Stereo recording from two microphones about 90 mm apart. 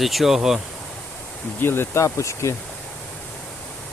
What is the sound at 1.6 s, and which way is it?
Speech, 25° left (ahead or behind).